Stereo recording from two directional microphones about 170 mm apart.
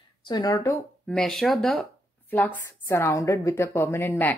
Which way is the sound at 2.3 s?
10° left (ahead or behind).